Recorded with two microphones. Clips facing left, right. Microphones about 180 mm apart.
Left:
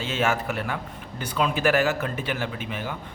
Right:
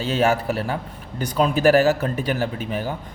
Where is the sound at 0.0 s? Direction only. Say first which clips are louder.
Right 5 dB; 40° right (ahead or behind).